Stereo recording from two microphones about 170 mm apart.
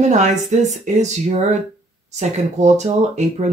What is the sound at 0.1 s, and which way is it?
Speech, 45° right (ahead or behind).